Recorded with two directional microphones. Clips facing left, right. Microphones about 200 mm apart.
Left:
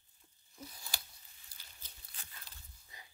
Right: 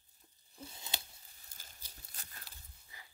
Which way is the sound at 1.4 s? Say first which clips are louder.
Right 4 dB; 45° right (ahead or behind).